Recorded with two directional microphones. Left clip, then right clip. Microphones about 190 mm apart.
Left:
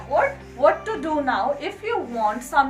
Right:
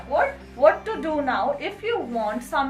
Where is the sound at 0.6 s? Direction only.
20° right (ahead or behind).